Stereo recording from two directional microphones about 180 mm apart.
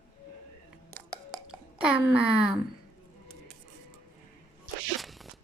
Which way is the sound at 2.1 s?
5° right (ahead or behind).